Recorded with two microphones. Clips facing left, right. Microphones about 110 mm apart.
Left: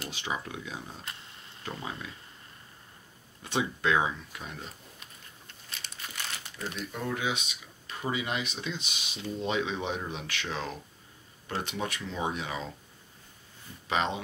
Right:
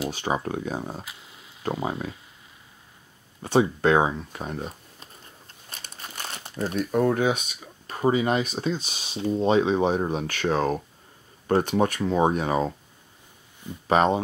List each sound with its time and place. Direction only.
0.1 s speech: 45° right (ahead or behind)
1.0 s a sound: 5° right (ahead or behind)
1.9 s speech: 45° right (ahead or behind)
3.4 s speech: 40° right (ahead or behind)
5.7 s crumpling: 40° right (ahead or behind)
6.3 s speech: 35° right (ahead or behind)
13.8 s speech: 45° right (ahead or behind)